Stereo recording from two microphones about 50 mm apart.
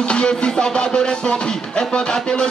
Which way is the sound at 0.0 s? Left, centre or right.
Centre.